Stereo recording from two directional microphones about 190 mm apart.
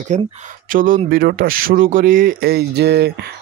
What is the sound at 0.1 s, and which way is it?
Speech, 40° right (ahead or behind).